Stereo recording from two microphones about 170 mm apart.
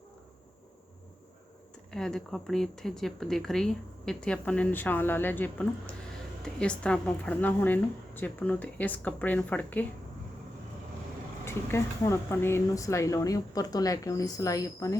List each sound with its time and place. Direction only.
1.9 s a woman's voice: 5° left (ahead or behind)
11.4 s speech: 15° left (ahead or behind)